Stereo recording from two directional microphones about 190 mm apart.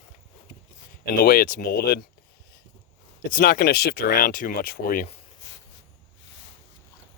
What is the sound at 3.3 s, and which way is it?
Speech, 50° left (ahead or behind).